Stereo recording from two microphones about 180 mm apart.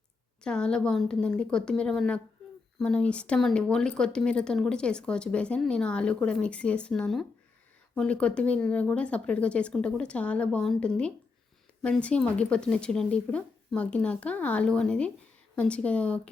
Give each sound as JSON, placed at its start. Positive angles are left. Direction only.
{"t": 0.4, "sound": "speech", "side_deg": 5}